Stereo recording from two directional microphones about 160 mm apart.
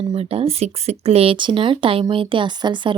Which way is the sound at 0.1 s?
40° right (ahead or behind).